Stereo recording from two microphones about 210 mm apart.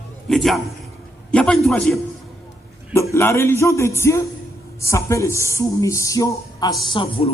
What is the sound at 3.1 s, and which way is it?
A man's voice, 10° left (ahead or behind).